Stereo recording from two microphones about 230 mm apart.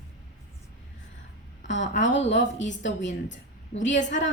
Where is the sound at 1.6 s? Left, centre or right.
Left.